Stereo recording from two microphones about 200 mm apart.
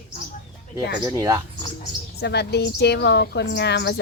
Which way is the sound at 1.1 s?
15° right (ahead or behind).